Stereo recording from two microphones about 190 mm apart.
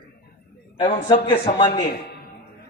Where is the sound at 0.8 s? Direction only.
30° left (ahead or behind).